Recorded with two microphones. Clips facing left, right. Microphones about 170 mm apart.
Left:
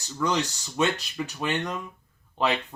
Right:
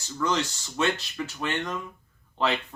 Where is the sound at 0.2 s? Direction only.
15° left (ahead or behind).